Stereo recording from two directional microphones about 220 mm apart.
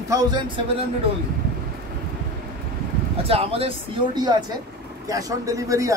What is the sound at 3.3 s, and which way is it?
Speech, 25° right (ahead or behind).